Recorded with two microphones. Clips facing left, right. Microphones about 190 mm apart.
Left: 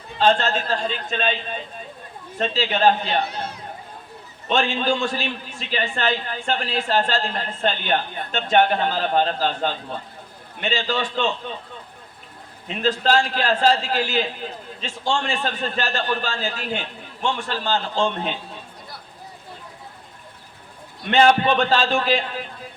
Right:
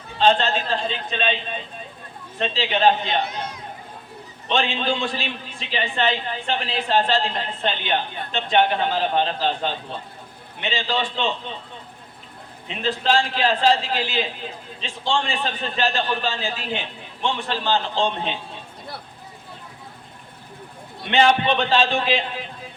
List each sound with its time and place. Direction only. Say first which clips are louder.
0.2 s a man's voice: even; 45° left (ahead or behind)
2.4 s a man's voice: even; 40° left (ahead or behind)
12.6 s a man's voice: left 2 dB; 45° left (ahead or behind)
21.1 s a man's voice: left 2 dB; 45° left (ahead or behind)